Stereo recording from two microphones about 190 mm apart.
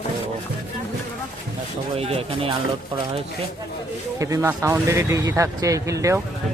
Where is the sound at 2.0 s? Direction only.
30° right (ahead or behind).